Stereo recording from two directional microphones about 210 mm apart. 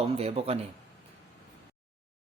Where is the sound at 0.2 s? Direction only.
30° right (ahead or behind).